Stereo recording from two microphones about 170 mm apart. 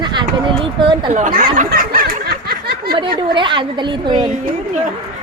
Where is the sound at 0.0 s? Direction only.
25° right (ahead or behind).